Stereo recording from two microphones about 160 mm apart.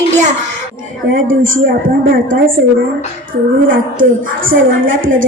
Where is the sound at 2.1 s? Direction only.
60° right (ahead or behind).